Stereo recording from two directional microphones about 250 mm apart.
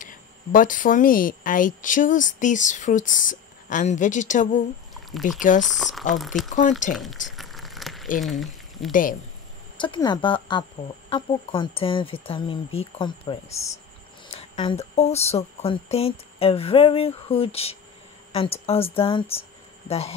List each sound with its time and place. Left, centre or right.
0.0 s speech: left
5.6 s speech: centre
7.3 s a sound: centre
8.2 s speech: centre
9.8 s speech: centre